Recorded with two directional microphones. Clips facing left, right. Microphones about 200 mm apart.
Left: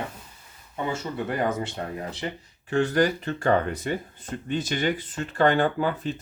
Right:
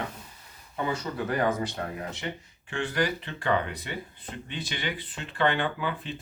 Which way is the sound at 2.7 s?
40° left (ahead or behind).